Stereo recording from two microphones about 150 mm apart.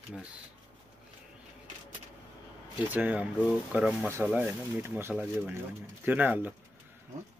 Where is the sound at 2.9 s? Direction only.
10° right (ahead or behind).